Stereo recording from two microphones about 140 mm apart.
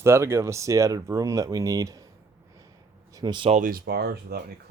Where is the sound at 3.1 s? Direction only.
30° right (ahead or behind).